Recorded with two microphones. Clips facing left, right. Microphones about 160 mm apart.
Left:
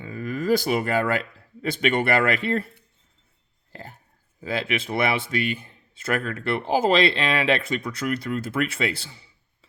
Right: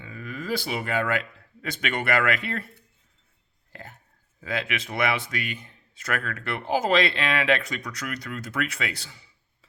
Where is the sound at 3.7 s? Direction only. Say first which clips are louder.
Left 3 dB; 30° left (ahead or behind).